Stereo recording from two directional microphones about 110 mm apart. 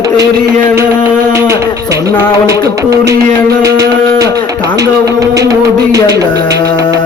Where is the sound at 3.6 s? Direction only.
30° right (ahead or behind).